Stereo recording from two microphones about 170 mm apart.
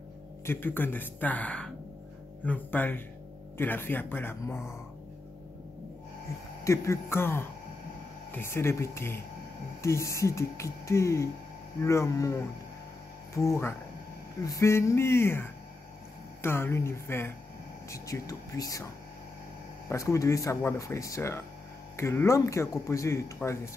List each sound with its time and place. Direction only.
0.5 s a man's voice: 10° left (ahead or behind)
6.6 s a man's voice: 15° left (ahead or behind)
13.5 s a man's voice: 15° left (ahead or behind)
19.9 s a man's voice: 20° left (ahead or behind)